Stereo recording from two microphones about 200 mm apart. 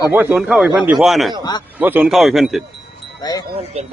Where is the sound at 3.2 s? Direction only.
20° left (ahead or behind).